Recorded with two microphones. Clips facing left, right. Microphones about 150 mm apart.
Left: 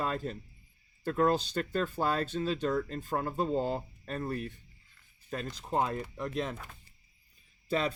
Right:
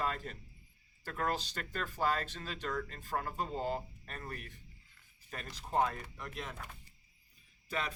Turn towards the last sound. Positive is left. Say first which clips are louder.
# left 8 dB
turn(degrees=30)  # may be behind; listen again after turning